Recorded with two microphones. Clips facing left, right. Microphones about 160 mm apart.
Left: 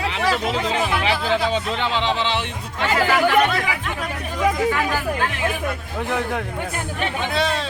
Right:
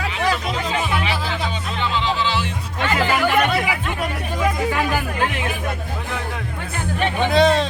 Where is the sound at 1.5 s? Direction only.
80° left.